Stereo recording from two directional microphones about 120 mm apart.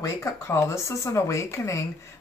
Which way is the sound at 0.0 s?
25° left (ahead or behind).